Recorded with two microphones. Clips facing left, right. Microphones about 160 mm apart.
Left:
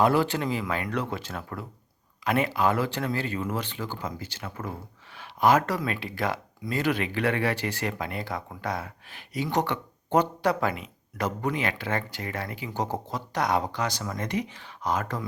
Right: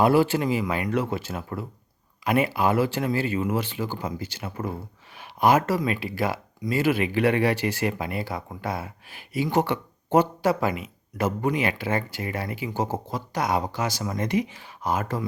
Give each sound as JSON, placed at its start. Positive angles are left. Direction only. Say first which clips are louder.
{"t": 0.0, "sound": "speech", "louder": "right 3 dB", "side_deg": -10}
{"t": 4.4, "sound": "speech", "louder": "right 4 dB", "side_deg": -25}
{"t": 5.1, "sound": "speech", "louder": "right 1 dB", "side_deg": -15}